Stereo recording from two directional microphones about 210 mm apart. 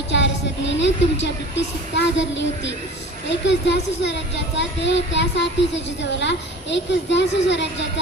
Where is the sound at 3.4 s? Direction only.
55° left (ahead or behind).